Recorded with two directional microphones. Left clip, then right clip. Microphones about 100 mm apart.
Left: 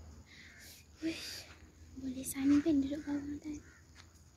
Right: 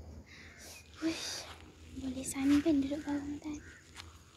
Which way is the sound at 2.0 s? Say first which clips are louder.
Right 1 dB; 10° left (ahead or behind).